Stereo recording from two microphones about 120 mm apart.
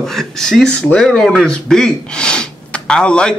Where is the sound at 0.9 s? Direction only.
5° left (ahead or behind).